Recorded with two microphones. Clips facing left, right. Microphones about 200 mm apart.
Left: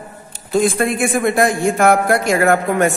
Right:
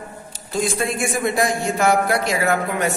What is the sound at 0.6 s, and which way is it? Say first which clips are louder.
Speech: left 6 dB; 55° left (ahead or behind).